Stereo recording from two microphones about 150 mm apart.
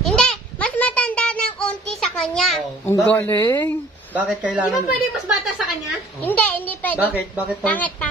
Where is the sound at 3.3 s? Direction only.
30° left (ahead or behind).